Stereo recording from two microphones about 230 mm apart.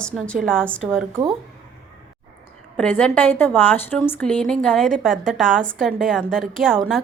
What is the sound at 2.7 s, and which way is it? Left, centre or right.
A woman's voice, centre.